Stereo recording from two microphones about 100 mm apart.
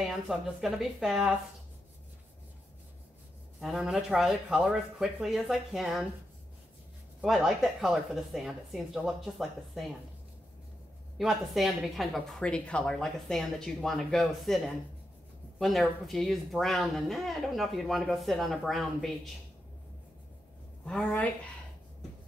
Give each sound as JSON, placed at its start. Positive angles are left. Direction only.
{"t": 0.0, "sound": "speech", "side_deg": -5}
{"t": 3.6, "sound": "speech", "side_deg": -5}
{"t": 7.2, "sound": "speech", "side_deg": -5}
{"t": 11.1, "sound": "speech", "side_deg": 0}
{"t": 15.6, "sound": "speech", "side_deg": 0}
{"t": 20.8, "sound": "a woman's voice", "side_deg": 10}